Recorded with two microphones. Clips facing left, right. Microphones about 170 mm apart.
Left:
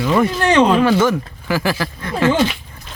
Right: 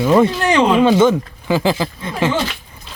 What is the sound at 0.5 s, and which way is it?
Speech, 5° right (ahead or behind).